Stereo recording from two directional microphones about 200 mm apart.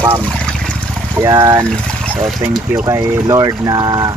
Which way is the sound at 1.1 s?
20° right (ahead or behind).